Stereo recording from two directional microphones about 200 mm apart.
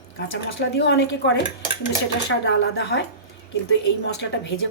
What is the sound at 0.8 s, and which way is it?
A woman's voice, 65° left (ahead or behind).